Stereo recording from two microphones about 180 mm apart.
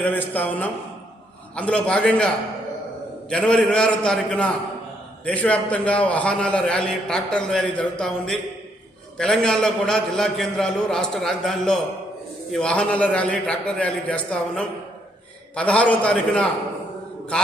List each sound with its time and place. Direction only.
0.0 s a man's voice: 10° left (ahead or behind)